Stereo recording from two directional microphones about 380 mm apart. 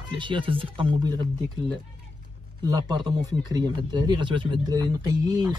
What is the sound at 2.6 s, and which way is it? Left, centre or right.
Speech, centre.